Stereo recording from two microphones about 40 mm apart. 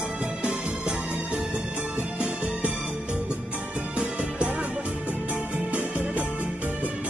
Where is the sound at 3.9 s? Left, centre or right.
Right.